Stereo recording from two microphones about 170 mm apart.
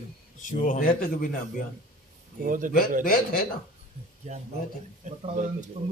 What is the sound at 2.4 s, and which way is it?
Speech, 55° right (ahead or behind).